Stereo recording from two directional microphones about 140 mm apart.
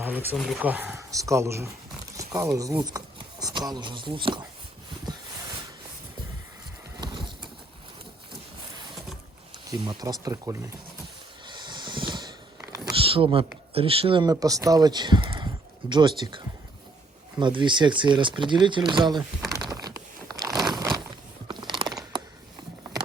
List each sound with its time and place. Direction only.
0.3 s speech: centre (ahead or behind)
0.6 s speech: 10° right (ahead or behind)
1.1 s speech: 25° right (ahead or behind)
7.0 s horse: 35° right (ahead or behind)
9.6 s speech: 30° right (ahead or behind)
11.4 s a sound: 30° right (ahead or behind)
13.7 s speech: 40° right (ahead or behind)
19.5 s crumpling: 25° right (ahead or behind)
20.6 s a sound: 30° right (ahead or behind)
21.4 s mechanisms: 35° right (ahead or behind)